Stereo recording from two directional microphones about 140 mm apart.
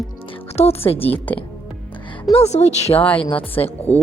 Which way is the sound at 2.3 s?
50° left (ahead or behind).